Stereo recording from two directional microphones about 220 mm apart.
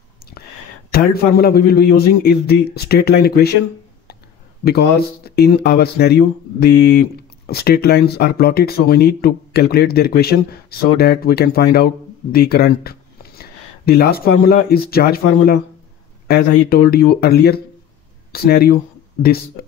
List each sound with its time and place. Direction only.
0.9 s speech: 45° left (ahead or behind)
4.6 s speech: 45° left (ahead or behind)